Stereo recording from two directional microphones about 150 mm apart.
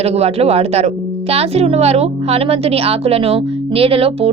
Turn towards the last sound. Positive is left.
turn(degrees=-40)  # may be behind; listen again after turning